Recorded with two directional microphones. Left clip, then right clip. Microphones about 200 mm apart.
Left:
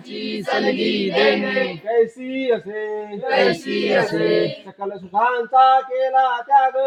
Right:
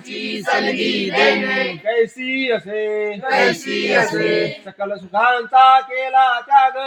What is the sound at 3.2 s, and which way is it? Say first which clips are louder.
Choir: even; 5° left (ahead or behind).